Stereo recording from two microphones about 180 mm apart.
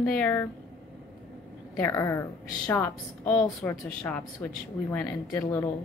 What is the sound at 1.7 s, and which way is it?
A woman's voice, 15° left (ahead or behind).